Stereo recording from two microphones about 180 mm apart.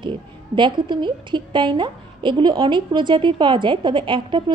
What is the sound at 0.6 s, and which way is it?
A woman's voice, 25° right (ahead or behind).